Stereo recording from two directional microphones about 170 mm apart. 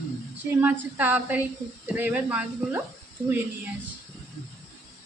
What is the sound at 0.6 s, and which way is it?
A woman's voice, 10° right (ahead or behind).